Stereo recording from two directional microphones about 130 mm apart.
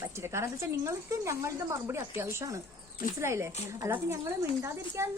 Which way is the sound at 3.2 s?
20° right (ahead or behind).